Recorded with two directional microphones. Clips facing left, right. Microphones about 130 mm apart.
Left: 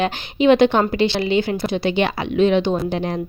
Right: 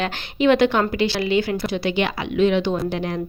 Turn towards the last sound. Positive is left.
turn(degrees=25)  # may be behind; listen again after turning